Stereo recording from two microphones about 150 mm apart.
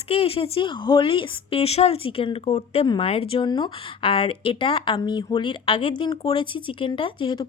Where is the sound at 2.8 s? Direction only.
30° left (ahead or behind).